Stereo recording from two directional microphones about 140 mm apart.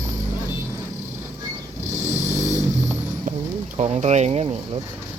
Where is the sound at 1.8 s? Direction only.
60° right (ahead or behind).